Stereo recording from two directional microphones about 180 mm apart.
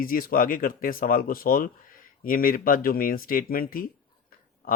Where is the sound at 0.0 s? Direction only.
50° left (ahead or behind).